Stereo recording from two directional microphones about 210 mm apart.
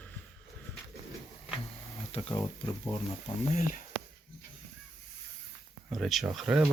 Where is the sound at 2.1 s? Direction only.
30° left (ahead or behind).